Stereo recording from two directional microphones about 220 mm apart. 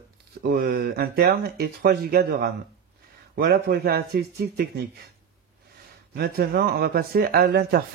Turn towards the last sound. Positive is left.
turn(degrees=-45)  # may be behind; listen again after turning